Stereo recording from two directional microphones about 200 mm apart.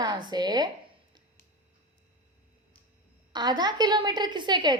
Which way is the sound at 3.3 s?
20° right (ahead or behind).